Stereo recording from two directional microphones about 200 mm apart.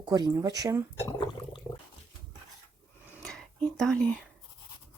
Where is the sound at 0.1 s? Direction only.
20° right (ahead or behind).